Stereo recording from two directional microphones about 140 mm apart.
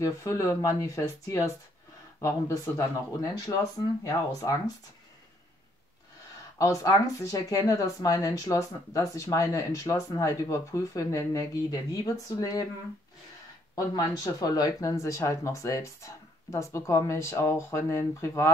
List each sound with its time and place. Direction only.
0.0 s speech: 20° left (ahead or behind)
6.6 s speech: 25° left (ahead or behind)
13.7 s speech: 25° left (ahead or behind)